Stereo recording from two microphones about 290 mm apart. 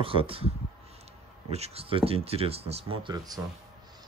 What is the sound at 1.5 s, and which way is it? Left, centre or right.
Speech, right.